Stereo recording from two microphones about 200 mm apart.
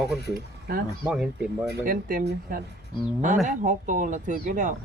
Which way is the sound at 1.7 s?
45° right (ahead or behind).